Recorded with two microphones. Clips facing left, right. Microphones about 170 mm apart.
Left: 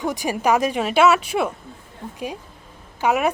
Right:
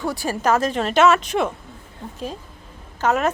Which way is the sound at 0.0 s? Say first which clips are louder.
Left 1 dB; 15° left (ahead or behind).